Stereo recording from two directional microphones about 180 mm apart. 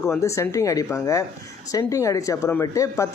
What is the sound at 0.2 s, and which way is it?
A woman's voice, 15° left (ahead or behind).